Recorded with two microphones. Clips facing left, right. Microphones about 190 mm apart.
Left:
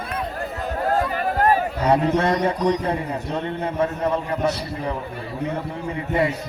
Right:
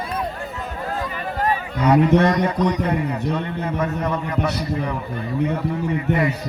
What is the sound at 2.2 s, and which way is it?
A man's voice, 30° left (ahead or behind).